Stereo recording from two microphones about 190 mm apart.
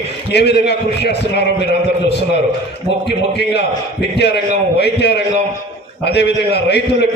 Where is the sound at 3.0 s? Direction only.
60° left (ahead or behind).